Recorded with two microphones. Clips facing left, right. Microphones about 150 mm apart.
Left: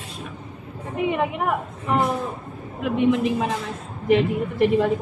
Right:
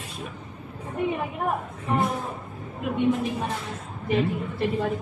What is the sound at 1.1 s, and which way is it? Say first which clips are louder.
A woman's voice: left 5 dB; 90° left.